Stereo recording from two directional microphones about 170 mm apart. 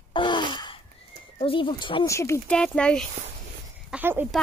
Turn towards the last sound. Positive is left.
turn(degrees=-10)  # may be behind; listen again after turning